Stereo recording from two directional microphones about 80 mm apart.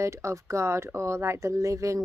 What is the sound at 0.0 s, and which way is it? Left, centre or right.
A woman's voice, right.